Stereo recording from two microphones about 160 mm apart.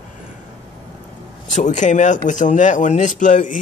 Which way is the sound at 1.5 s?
50° left (ahead or behind).